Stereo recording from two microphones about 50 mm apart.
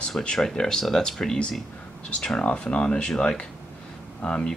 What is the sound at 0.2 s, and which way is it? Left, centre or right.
Speech, centre.